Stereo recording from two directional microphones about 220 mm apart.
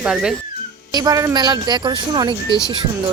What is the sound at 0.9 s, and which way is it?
Speech, 15° right (ahead or behind).